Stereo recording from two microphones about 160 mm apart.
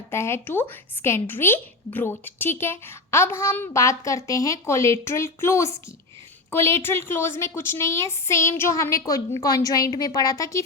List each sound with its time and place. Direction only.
0.1 s a woman's voice: 15° left (ahead or behind)